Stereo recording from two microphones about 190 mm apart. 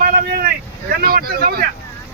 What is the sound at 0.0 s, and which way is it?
Vehicle, 50° right (ahead or behind).